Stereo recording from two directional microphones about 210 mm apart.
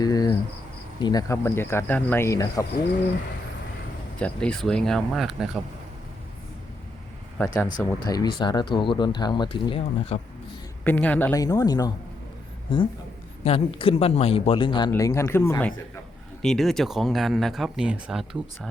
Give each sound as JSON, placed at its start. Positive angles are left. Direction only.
{"t": 0.0, "sound": "cricket", "side_deg": 20}
{"t": 0.9, "sound": "a man's voice", "side_deg": 20}
{"t": 4.2, "sound": "speech", "side_deg": 5}
{"t": 7.3, "sound": "a man's voice", "side_deg": 10}
{"t": 10.8, "sound": "a man's voice", "side_deg": 5}